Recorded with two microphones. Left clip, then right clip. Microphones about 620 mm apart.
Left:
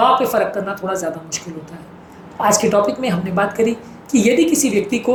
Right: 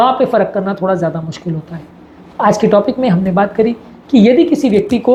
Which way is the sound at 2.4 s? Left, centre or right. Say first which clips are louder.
Right 4 dB; right.